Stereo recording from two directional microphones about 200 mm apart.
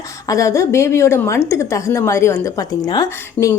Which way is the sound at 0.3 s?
15° left (ahead or behind).